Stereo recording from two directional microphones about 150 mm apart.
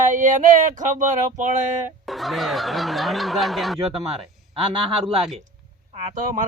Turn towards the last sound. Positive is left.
turn(degrees=-55)  # may be behind; listen again after turning